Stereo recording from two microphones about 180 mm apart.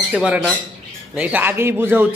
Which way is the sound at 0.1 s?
5° right (ahead or behind).